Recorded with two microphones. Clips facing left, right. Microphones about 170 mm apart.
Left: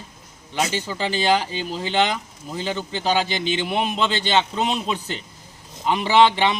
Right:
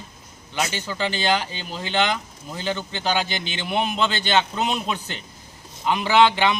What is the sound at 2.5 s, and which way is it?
Speech, centre (ahead or behind).